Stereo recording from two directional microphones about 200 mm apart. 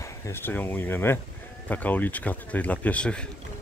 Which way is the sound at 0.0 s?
15° left (ahead or behind).